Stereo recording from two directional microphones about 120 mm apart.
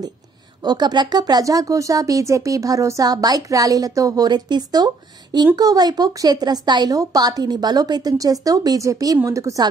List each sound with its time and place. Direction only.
0.7 s speech: 35° right (ahead or behind)